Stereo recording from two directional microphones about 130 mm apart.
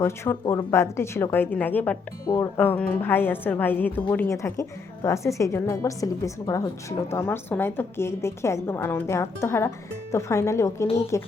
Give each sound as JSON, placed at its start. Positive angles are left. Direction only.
{"t": 0.0, "sound": "a woman's voice", "side_deg": 20}
{"t": 2.2, "sound": "speech", "side_deg": 25}
{"t": 2.6, "sound": "a woman's voice", "side_deg": 10}